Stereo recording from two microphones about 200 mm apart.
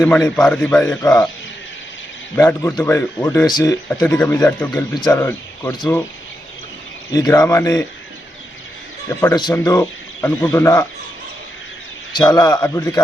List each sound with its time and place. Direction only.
0.0 s speech: 10° left (ahead or behind)
2.3 s speech: 15° left (ahead or behind)
7.1 s speech: 20° left (ahead or behind)
9.2 s speech: 20° left (ahead or behind)
12.3 s a man's voice: 20° left (ahead or behind)